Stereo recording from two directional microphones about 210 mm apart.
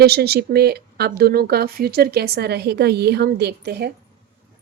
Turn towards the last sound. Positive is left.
turn(degrees=-50)  # may be behind; listen again after turning